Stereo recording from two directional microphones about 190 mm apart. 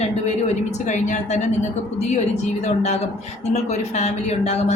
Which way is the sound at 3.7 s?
35° left (ahead or behind).